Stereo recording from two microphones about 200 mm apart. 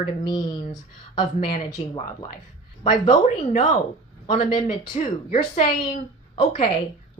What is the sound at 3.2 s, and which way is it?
A woman's voice, 35° left (ahead or behind).